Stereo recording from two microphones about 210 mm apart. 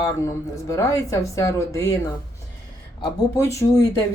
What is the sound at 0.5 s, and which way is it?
Speech, 15° left (ahead or behind).